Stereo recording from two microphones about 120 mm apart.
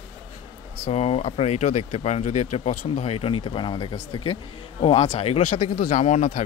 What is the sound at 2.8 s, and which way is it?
A man's voice, 55° left (ahead or behind).